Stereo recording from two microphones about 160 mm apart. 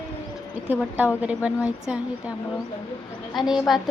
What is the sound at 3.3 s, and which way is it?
Speech, centre (ahead or behind).